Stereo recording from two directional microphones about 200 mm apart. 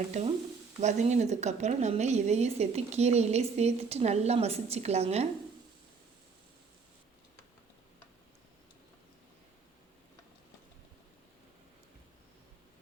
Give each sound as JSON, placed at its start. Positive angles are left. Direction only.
{"t": 0.8, "sound": "a woman's voice", "side_deg": -35}